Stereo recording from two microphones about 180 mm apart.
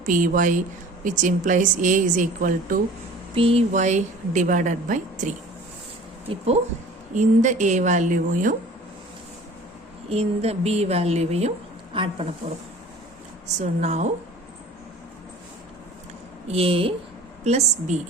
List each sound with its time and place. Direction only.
0.0 s speech: 50° right (ahead or behind)
3.3 s a woman's voice: 35° right (ahead or behind)
10.1 s a woman's voice: 35° right (ahead or behind)
13.6 s a woman's voice: 40° right (ahead or behind)
16.5 s a woman's voice: 30° right (ahead or behind)